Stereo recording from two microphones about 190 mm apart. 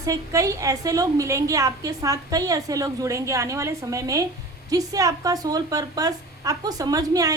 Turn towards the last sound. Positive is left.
turn(degrees=-20)  # may be behind; listen again after turning